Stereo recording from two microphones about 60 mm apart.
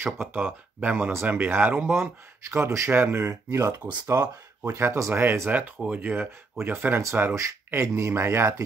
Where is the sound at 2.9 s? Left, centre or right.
Right.